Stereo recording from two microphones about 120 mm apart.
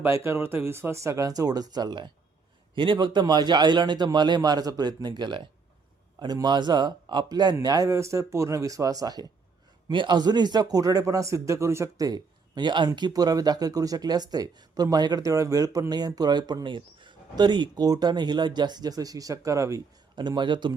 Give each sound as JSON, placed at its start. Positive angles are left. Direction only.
{"t": 0.0, "sound": "speech", "side_deg": -20}
{"t": 20.1, "sound": "speech", "side_deg": -40}